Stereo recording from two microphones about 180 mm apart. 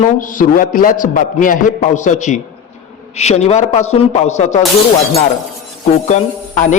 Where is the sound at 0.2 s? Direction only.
50° left (ahead or behind).